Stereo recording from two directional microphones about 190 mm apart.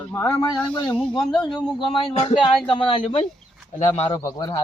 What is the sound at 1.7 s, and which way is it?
A man's voice, 30° left (ahead or behind).